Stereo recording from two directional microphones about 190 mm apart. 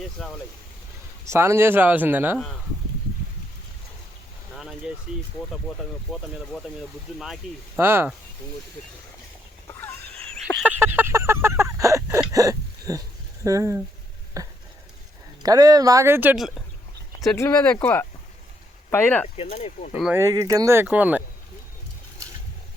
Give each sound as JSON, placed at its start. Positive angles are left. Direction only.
{"t": 0.2, "sound": "speech", "side_deg": 0}
{"t": 1.2, "sound": "speech", "side_deg": -15}
{"t": 4.5, "sound": "a sound", "side_deg": 0}
{"t": 5.6, "sound": "speech", "side_deg": 0}
{"t": 9.6, "sound": "a sound", "side_deg": 10}
{"t": 13.4, "sound": "speech", "side_deg": -15}
{"t": 14.4, "sound": "a sound", "side_deg": -20}
{"t": 15.4, "sound": "speech", "side_deg": -20}
{"t": 17.3, "sound": "speech", "side_deg": 15}
{"t": 18.9, "sound": "speech", "side_deg": 10}
{"t": 19.4, "sound": "speech", "side_deg": 40}
{"t": 20.0, "sound": "speech", "side_deg": -5}
{"t": 20.2, "sound": "speech", "side_deg": -15}